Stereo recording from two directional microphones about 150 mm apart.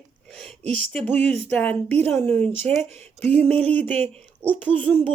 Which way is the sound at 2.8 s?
45° right (ahead or behind).